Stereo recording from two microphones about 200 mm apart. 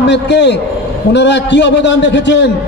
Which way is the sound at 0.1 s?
60° left (ahead or behind).